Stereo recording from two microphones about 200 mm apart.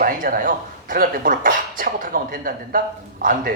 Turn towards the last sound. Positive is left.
turn(degrees=-45)  # may be behind; listen again after turning